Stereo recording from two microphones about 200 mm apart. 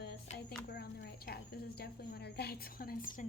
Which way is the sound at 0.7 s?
55° left (ahead or behind).